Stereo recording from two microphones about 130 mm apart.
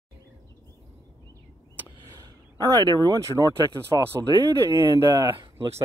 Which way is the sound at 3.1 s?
25° right (ahead or behind).